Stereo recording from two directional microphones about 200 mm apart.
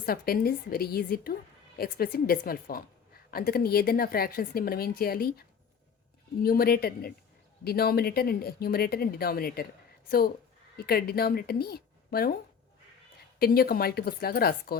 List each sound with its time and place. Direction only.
0.0 s a woman's voice: 50° left (ahead or behind)
13.4 s a woman's voice: 50° left (ahead or behind)